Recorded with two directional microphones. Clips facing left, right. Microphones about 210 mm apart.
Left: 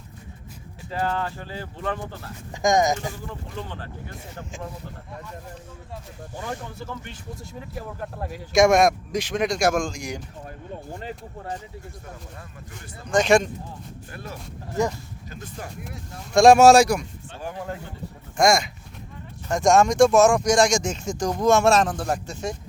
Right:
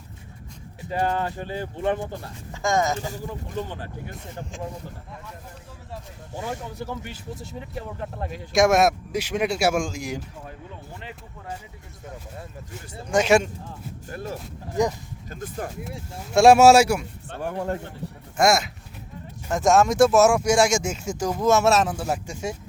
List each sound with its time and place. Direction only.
0.9 s speech: 15° right (ahead or behind)
2.5 s speech: 15° left (ahead or behind)
4.5 s speech: centre (ahead or behind)
5.9 s speech: 10° right (ahead or behind)
7.3 s speech: centre (ahead or behind)
10.9 s speech: 40° left (ahead or behind)
13.1 s speech: 5° right (ahead or behind)
14.1 s speech: 45° right (ahead or behind)
14.7 s speech: 15° right (ahead or behind)
15.3 s speech: 50° right (ahead or behind)
16.3 s speech: 5° right (ahead or behind)
17.2 s a man's voice: 55° right (ahead or behind)
18.3 s speech: 5° right (ahead or behind)